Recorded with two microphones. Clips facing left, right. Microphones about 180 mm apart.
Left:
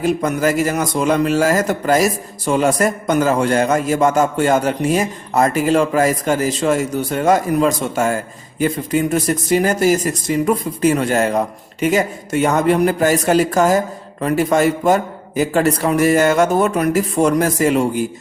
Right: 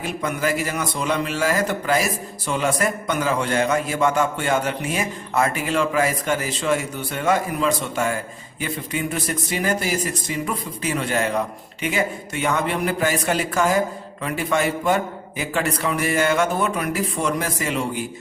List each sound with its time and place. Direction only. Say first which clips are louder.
0.0 s a man's voice: left 8 dB; 40° left (ahead or behind)